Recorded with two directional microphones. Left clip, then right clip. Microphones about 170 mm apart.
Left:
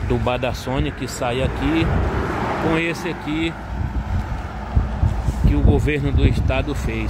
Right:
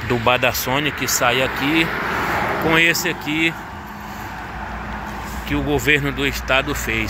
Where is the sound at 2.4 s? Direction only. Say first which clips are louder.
Right 2 dB; 45° right (ahead or behind).